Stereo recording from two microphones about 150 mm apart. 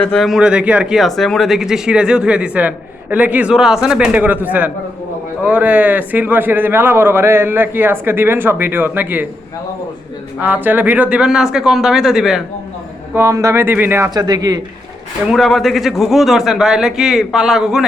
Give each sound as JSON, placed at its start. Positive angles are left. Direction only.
{"t": 0.0, "sound": "a man's voice", "side_deg": 5}
{"t": 10.4, "sound": "speech", "side_deg": -10}
{"t": 13.1, "sound": "a man's voice", "side_deg": -20}
{"t": 14.1, "sound": "speech", "side_deg": -25}
{"t": 15.3, "sound": "speech", "side_deg": 0}